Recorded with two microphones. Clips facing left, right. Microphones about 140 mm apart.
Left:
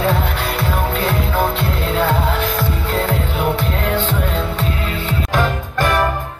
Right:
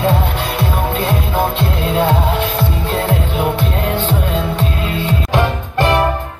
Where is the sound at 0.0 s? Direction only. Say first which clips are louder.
Right 2 dB; 20° right (ahead or behind).